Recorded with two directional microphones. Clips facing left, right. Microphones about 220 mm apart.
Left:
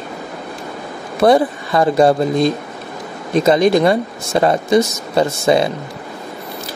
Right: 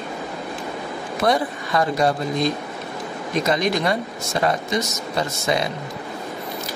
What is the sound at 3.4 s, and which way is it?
Speech, 30° left (ahead or behind).